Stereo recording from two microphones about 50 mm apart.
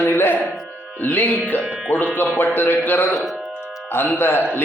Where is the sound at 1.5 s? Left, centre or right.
Left.